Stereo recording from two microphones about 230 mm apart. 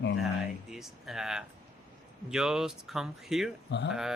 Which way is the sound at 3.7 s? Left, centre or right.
Left.